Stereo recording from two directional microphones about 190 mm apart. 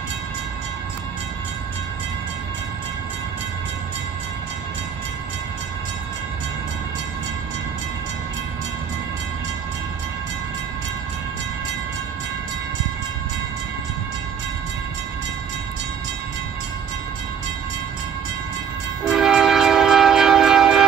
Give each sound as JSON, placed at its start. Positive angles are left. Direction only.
{"t": 19.0, "sound": "train", "side_deg": 0}